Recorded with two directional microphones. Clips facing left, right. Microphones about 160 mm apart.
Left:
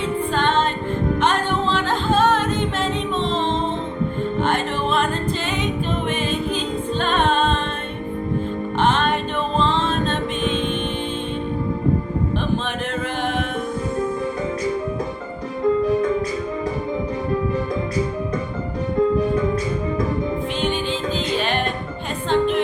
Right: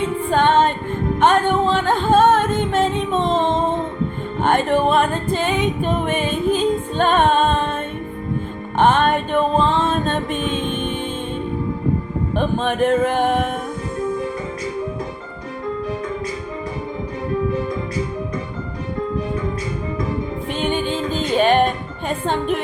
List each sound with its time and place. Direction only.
0.3 s music: 50° right (ahead or behind)
8.8 s music: 50° right (ahead or behind)
12.4 s music: 50° right (ahead or behind)
20.6 s music: 50° right (ahead or behind)